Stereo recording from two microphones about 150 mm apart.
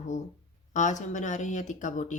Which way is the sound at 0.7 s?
55° left (ahead or behind).